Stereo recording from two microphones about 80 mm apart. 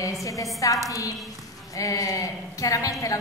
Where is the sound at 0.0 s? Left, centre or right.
Left.